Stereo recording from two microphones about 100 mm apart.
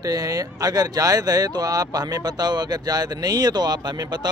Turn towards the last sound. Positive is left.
turn(degrees=-45)  # may be behind; listen again after turning